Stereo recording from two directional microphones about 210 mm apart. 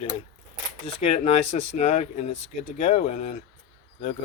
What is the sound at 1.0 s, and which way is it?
Speech, 30° left (ahead or behind).